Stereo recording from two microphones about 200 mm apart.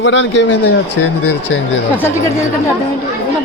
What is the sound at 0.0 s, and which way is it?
Speech, 65° left (ahead or behind).